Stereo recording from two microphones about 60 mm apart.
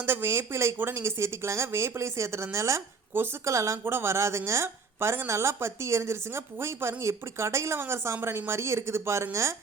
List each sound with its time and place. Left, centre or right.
0.0 s a woman's voice: right